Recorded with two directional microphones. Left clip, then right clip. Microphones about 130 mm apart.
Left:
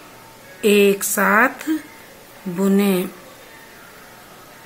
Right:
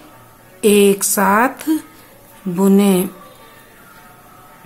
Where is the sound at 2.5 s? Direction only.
25° right (ahead or behind).